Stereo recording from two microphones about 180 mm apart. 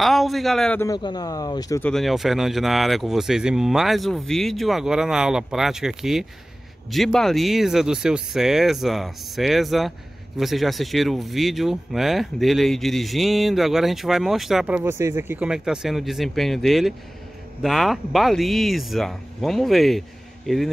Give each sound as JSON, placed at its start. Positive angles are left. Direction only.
{"t": 0.0, "sound": "a man's voice", "side_deg": 0}
{"t": 0.7, "sound": "speech", "side_deg": 20}
{"t": 1.8, "sound": "speech", "side_deg": 5}